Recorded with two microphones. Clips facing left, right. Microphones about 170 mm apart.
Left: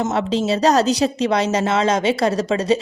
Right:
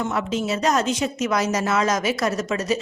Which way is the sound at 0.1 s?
30° left (ahead or behind).